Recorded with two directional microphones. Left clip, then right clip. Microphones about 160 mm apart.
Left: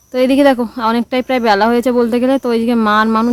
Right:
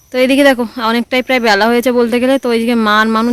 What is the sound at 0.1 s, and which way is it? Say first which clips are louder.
Speech: right 1 dB; 5° right (ahead or behind).